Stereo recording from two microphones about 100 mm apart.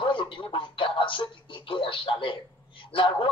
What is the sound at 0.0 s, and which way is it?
Speech, 55° left (ahead or behind).